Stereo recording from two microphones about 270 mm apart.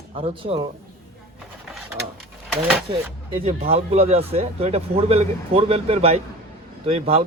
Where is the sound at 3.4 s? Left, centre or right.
Right.